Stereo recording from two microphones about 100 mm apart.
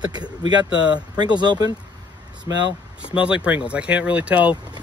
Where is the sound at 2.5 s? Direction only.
30° right (ahead or behind).